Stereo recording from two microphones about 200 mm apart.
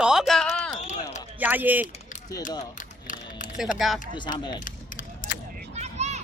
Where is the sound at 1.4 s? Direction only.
10° right (ahead or behind).